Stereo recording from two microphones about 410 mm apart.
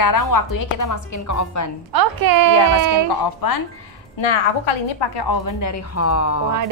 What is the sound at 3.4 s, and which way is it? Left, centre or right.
Speech, left.